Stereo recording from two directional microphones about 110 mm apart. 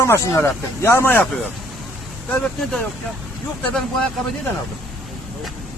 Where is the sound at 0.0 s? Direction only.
25° left (ahead or behind).